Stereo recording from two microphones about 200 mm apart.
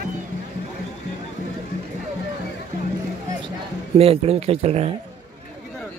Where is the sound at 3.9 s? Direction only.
30° right (ahead or behind).